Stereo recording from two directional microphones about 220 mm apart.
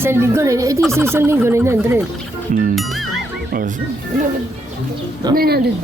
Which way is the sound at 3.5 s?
40° right (ahead or behind).